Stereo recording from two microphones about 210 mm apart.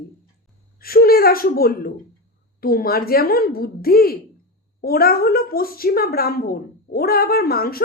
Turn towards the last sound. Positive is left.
turn(degrees=45)  # may be behind; listen again after turning